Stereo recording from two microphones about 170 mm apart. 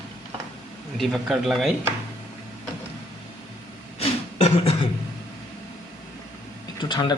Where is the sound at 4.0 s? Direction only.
35° left (ahead or behind).